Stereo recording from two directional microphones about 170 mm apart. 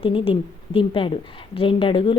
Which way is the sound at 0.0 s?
30° left (ahead or behind).